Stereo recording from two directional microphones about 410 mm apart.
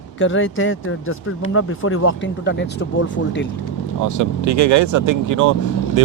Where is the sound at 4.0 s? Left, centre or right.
Right.